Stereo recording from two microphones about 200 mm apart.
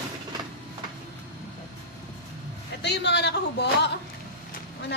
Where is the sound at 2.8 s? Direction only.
60° left (ahead or behind).